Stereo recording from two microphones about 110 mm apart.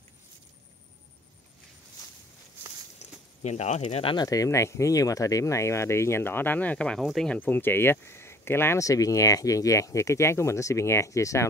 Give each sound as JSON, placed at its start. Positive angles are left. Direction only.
{"t": 3.0, "sound": "a sound", "side_deg": 90}
{"t": 3.8, "sound": "speech", "side_deg": 55}
{"t": 4.2, "sound": "speech", "side_deg": 30}
{"t": 7.3, "sound": "speech", "side_deg": 15}